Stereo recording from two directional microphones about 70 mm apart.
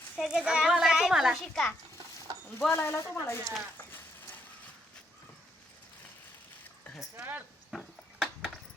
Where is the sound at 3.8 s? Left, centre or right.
Left.